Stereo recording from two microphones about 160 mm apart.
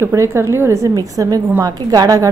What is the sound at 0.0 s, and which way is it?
A woman's voice, 15° right (ahead or behind).